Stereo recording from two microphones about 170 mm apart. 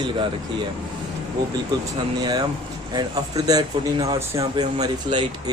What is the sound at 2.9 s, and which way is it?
A man's voice, 25° right (ahead or behind).